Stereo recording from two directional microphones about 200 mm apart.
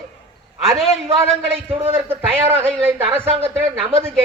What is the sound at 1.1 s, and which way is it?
A man's voice, 15° right (ahead or behind).